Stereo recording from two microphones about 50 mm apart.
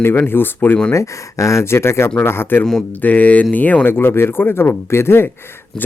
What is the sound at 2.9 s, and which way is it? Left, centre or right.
Speech, left.